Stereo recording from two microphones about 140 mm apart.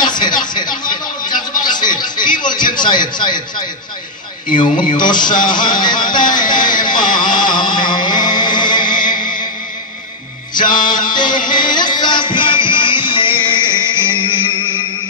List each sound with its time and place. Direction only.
0.0 s a sound: 30° left (ahead or behind)
4.9 s speech: 30° left (ahead or behind)
6.4 s music: 30° left (ahead or behind)
10.7 s music: 30° left (ahead or behind)